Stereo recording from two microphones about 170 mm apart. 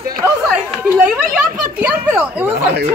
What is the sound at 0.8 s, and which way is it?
A child's voice, 10° right (ahead or behind).